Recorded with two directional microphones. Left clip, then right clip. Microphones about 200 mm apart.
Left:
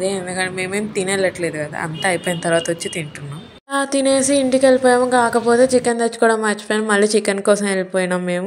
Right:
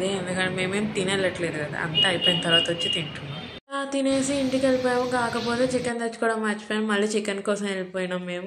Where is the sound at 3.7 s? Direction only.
45° left (ahead or behind).